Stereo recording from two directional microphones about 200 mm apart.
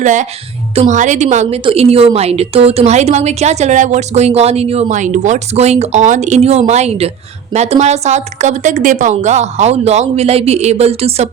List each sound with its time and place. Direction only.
0.0 s a woman's voice: 40° right (ahead or behind)